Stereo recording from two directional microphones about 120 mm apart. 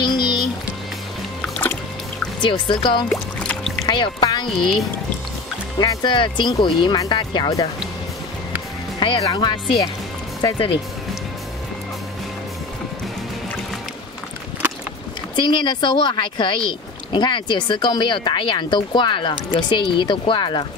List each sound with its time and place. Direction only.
0.0 s music: 40° left (ahead or behind)
2.4 s speech: 40° left (ahead or behind)
3.1 s music: 10° left (ahead or behind)
3.8 s music: 40° left (ahead or behind)
5.8 s speech: 40° left (ahead or behind)
9.0 s speech: 40° left (ahead or behind)
15.3 s speech: 40° left (ahead or behind)